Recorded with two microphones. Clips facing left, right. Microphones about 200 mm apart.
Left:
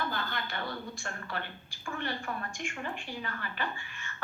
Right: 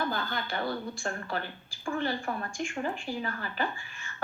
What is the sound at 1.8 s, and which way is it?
Speech, 30° right (ahead or behind).